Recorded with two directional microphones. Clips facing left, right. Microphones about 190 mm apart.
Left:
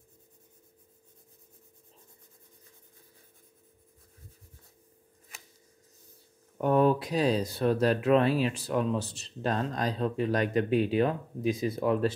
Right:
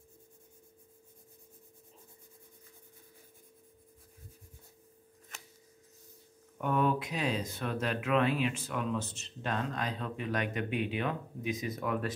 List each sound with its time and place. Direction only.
6.6 s speech: 35° left (ahead or behind)